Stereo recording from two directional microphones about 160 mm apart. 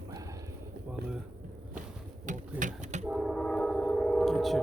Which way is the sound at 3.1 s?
5° right (ahead or behind).